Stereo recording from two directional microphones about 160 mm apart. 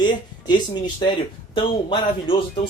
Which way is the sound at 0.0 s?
30° left (ahead or behind).